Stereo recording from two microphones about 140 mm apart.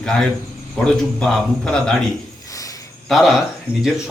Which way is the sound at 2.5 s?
25° left (ahead or behind).